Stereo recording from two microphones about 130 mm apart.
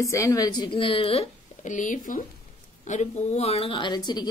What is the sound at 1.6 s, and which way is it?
Speech, 80° left.